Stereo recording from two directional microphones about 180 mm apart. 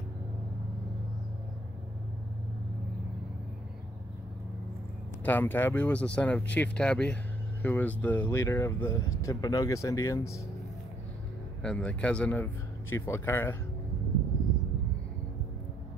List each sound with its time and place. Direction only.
5.2 s speech: 10° left (ahead or behind)
11.6 s speech: 5° left (ahead or behind)